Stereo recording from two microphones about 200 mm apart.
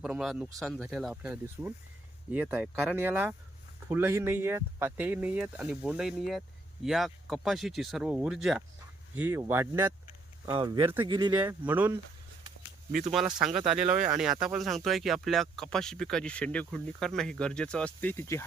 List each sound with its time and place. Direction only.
0.0 s speech: 5° right (ahead or behind)
10.4 s speech: 20° right (ahead or behind)
11.4 s speech: 10° right (ahead or behind)
12.9 s speech: 40° right (ahead or behind)
13.1 s speech: 5° right (ahead or behind); by 18.4 s 10° left (ahead or behind)